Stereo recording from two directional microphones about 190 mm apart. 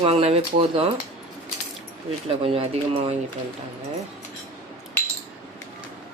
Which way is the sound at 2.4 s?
30° right (ahead or behind).